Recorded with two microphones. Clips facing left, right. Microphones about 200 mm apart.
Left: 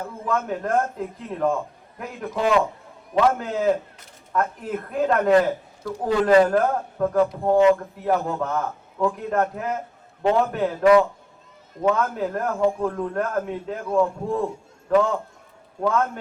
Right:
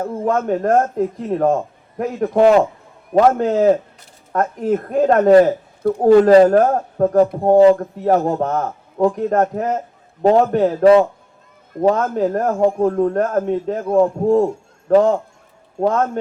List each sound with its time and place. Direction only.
0.0 s speech: 50° right (ahead or behind)
6.3 s a man's voice: 35° right (ahead or behind)
7.6 s a man's voice: 40° right (ahead or behind)